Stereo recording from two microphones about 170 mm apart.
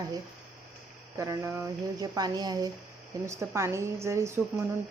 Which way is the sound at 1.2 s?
15° right (ahead or behind).